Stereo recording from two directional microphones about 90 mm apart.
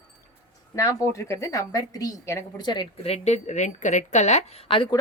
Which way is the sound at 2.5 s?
55° left (ahead or behind).